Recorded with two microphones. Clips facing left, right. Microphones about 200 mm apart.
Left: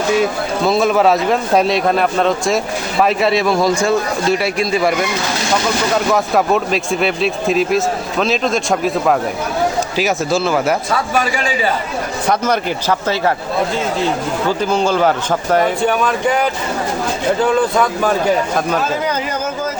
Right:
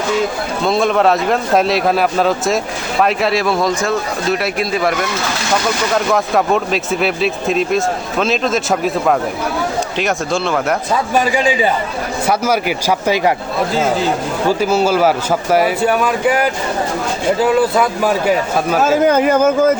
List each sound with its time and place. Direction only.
0.6 s a man's voice: 5° left (ahead or behind)
6.1 s a man's voice: centre (ahead or behind)
10.9 s speech: 15° right (ahead or behind)
14.6 s speech: 5° right (ahead or behind)
18.8 s speech: 50° right (ahead or behind)